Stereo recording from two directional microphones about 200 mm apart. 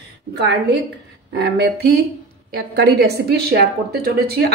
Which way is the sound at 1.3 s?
55° right (ahead or behind).